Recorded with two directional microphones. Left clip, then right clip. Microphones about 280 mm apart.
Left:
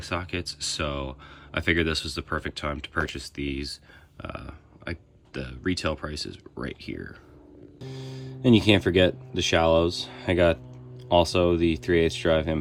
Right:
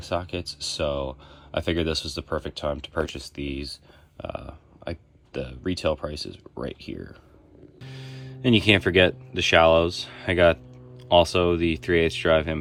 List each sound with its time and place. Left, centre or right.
0.1 s speech: centre
7.9 s a sound: right
8.4 s speech: centre